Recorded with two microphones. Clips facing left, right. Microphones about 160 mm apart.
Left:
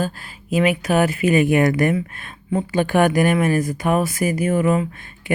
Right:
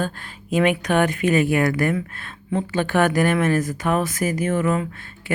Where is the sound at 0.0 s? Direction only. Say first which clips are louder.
Left 2 dB; 5° left (ahead or behind).